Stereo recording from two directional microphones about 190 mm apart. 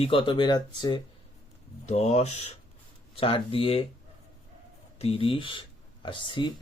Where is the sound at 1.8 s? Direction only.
35° left (ahead or behind).